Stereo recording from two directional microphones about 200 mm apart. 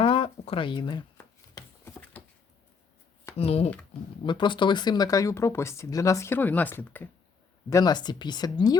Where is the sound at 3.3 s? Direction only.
30° left (ahead or behind).